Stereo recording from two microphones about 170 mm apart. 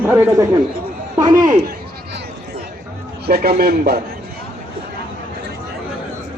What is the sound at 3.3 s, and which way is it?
Speech, 65° right (ahead or behind).